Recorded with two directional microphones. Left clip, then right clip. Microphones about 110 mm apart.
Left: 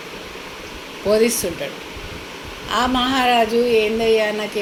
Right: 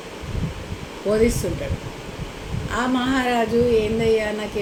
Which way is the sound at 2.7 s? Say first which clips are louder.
Left 4 dB; 20° right (ahead or behind).